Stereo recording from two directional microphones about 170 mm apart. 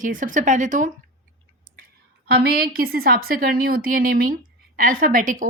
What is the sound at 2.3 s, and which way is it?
A woman's voice, 65° right (ahead or behind).